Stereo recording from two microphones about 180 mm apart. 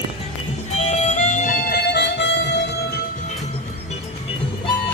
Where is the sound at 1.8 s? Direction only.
70° left (ahead or behind).